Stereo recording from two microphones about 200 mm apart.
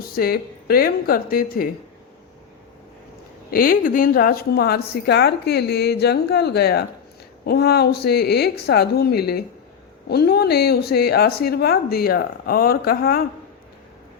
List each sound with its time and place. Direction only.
0.0 s a woman's voice: 50° left (ahead or behind)
3.5 s a woman's voice: 45° left (ahead or behind)